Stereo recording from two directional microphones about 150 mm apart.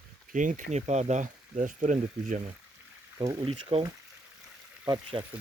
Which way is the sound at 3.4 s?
40° right (ahead or behind).